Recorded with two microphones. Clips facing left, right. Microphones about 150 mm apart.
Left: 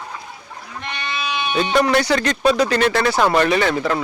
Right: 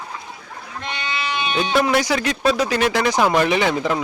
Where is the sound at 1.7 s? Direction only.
5° right (ahead or behind).